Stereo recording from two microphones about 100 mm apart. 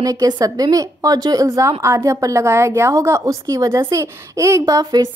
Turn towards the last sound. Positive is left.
turn(degrees=-35)  # may be behind; listen again after turning